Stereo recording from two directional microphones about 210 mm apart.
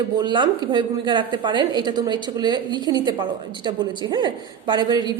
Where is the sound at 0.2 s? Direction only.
20° right (ahead or behind).